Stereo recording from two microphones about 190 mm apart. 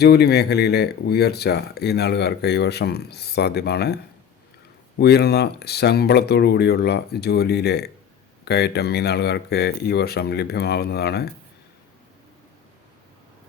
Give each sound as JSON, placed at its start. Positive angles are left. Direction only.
{"t": 0.0, "sound": "speech", "side_deg": 55}